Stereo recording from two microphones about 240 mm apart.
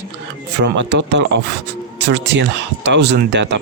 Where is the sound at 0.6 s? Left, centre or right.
Right.